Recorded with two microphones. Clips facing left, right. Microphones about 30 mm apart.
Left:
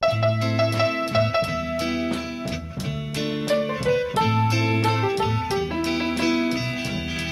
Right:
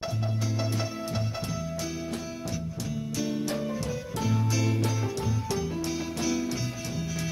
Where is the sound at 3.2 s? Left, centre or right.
Left.